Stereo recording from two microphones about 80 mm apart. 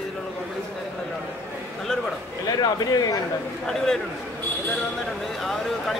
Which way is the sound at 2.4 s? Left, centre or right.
Left.